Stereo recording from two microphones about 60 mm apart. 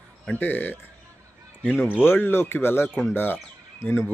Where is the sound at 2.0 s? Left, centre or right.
Left.